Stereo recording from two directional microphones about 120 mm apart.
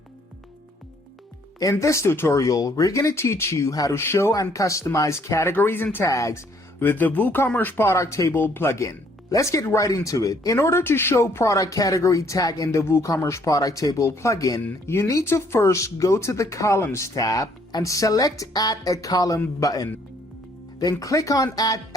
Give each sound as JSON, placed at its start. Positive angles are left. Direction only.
{"t": 1.7, "sound": "speech", "side_deg": 25}
{"t": 21.0, "sound": "speech", "side_deg": 30}